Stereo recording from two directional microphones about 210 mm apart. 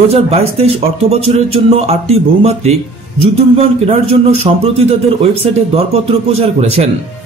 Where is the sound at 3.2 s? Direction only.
30° right (ahead or behind).